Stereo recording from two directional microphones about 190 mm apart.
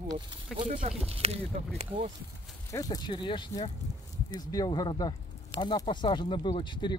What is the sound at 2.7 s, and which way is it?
Speech, 20° left (ahead or behind).